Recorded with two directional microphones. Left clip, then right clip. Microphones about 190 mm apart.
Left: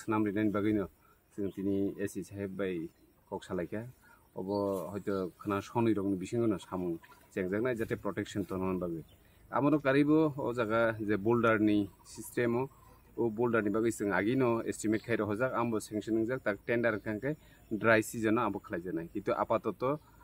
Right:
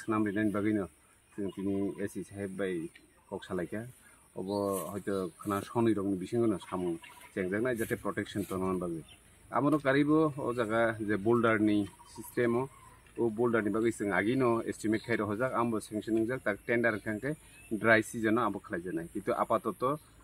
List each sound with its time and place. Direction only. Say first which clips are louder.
0.0 s speech: even; 30° left (ahead or behind)
4.4 s speech: even; 20° left (ahead or behind)
4.6 s speech: right 1 dB; 35° left (ahead or behind)